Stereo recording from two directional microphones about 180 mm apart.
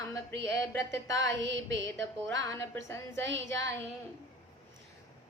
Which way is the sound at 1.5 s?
85° right.